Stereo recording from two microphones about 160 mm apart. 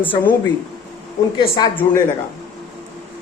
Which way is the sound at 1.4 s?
25° left (ahead or behind).